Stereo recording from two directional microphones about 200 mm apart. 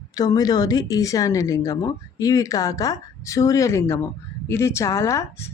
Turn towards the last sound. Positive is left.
turn(degrees=15)  # may be behind; listen again after turning